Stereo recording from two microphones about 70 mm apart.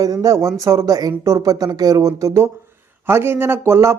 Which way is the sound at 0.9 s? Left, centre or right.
Right.